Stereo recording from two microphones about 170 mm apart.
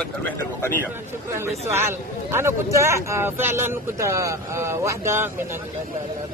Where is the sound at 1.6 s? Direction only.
15° right (ahead or behind).